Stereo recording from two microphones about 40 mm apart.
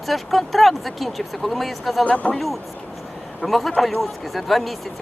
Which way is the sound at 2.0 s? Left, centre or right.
Left.